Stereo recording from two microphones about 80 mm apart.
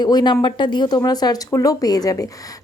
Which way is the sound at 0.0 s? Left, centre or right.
Left.